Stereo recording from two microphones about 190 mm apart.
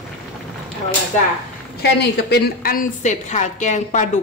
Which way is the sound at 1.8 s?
60° left (ahead or behind).